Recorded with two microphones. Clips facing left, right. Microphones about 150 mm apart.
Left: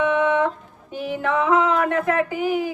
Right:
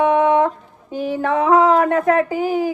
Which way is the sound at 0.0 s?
40° right (ahead or behind).